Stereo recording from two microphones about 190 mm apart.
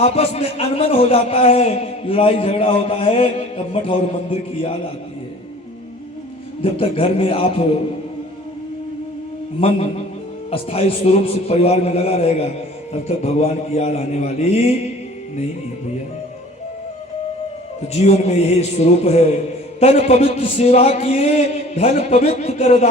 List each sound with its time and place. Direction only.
0.0 s a man's voice: 35° left (ahead or behind)
6.6 s a man's voice: 30° left (ahead or behind)
9.6 s a man's voice: 30° left (ahead or behind)
17.9 s a man's voice: 35° left (ahead or behind)